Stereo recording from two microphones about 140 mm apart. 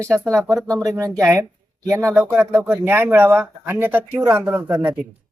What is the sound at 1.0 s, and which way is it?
A man's voice, 25° right (ahead or behind).